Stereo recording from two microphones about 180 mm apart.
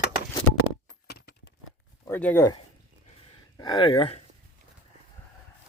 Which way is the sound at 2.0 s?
10° left (ahead or behind).